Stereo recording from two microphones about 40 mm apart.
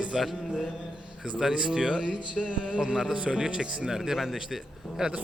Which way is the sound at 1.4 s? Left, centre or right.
Centre.